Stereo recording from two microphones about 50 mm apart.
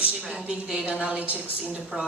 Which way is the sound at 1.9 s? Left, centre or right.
Centre.